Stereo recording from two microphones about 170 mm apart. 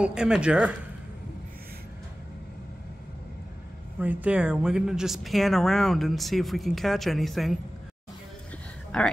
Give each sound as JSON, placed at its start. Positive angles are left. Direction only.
{"t": 0.0, "sound": "speech", "side_deg": -5}
{"t": 4.0, "sound": "speech", "side_deg": -10}
{"t": 8.9, "sound": "speech", "side_deg": 5}